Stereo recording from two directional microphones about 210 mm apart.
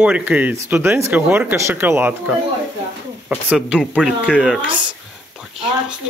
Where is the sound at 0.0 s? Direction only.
5° right (ahead or behind).